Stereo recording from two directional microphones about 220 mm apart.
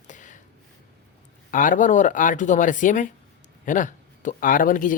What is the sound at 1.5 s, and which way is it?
Speech, 35° left (ahead or behind).